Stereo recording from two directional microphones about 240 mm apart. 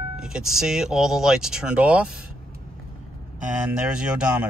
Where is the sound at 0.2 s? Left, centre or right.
Centre.